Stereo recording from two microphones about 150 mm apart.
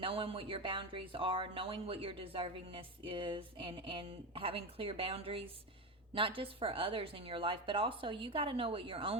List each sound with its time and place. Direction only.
0.0 s speech: 35° right (ahead or behind)